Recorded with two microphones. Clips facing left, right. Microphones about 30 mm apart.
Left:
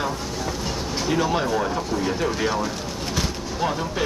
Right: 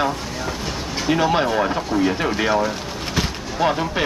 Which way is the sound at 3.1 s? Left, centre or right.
Right.